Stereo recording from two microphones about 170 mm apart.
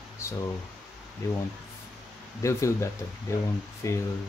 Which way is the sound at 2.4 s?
15° left (ahead or behind).